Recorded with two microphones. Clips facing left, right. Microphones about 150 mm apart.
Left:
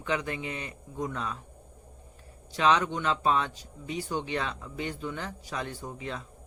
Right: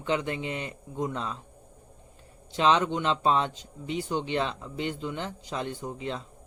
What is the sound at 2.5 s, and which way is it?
Speech, 30° right (ahead or behind).